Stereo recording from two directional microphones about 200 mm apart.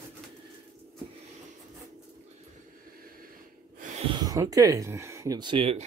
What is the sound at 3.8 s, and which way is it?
Speech, 35° right (ahead or behind).